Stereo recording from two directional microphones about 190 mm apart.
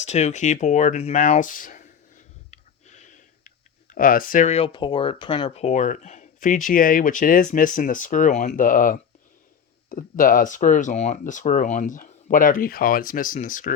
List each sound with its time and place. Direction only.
0.0 s speech: 35° left (ahead or behind)